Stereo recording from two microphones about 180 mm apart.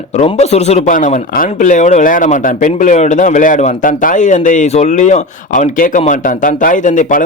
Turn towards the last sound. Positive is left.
turn(degrees=45)  # may be behind; listen again after turning